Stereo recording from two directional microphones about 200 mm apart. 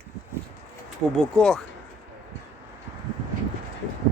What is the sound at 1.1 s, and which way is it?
Speech, 5° left (ahead or behind).